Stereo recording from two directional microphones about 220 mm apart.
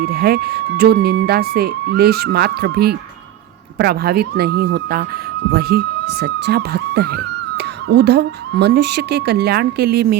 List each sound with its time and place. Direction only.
0.0 s speech: 45° right (ahead or behind)